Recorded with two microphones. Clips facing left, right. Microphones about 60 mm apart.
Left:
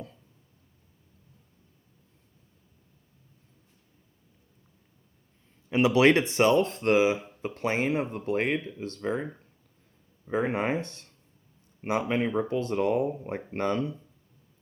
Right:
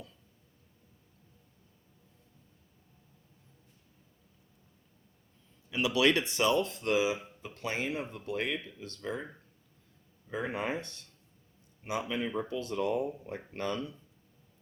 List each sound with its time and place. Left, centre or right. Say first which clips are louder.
5.7 s speech: left 7 dB; left